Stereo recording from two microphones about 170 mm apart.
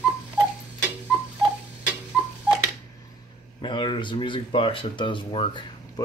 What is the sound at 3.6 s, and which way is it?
Speech, 30° left (ahead or behind).